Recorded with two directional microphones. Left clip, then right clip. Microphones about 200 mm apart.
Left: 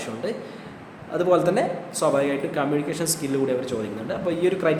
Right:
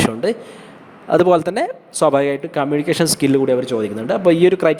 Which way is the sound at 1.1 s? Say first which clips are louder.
Right 6 dB; 50° right (ahead or behind).